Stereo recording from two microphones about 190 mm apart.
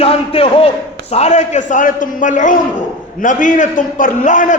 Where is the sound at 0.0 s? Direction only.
30° left (ahead or behind).